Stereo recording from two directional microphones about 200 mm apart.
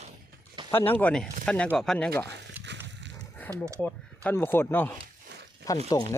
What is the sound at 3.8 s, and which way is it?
Speech, 10° left (ahead or behind).